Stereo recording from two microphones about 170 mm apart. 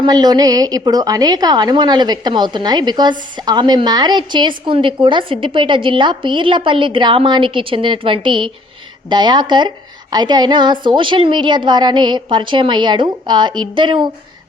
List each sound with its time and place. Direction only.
0.0 s a woman's voice: 25° right (ahead or behind)